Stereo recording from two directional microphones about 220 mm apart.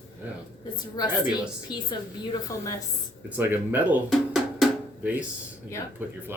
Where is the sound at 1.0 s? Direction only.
20° left (ahead or behind).